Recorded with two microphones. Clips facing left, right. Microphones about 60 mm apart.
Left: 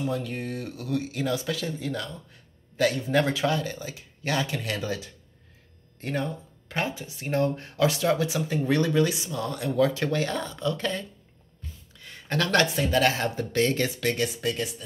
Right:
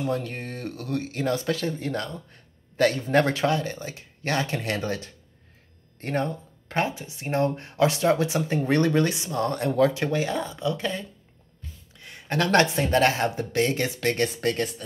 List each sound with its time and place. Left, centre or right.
0.0 s speech: right
3.4 s speech: right
7.0 s speech: right
9.8 s speech: right
13.9 s speech: right